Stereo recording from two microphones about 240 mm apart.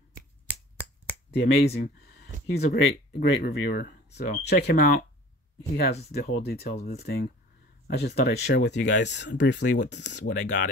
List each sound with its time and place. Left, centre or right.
1.3 s speech: left
6.1 s speech: left